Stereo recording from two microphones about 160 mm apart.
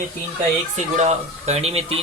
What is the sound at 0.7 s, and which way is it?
A man's voice, 45° right (ahead or behind).